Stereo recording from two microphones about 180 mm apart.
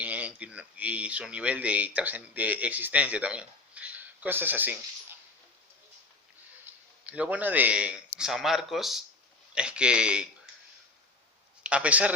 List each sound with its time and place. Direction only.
0.0 s speech: 10° right (ahead or behind)
6.7 s a sound: 10° right (ahead or behind)
7.0 s speech: 10° right (ahead or behind)
11.6 s speech: 5° right (ahead or behind)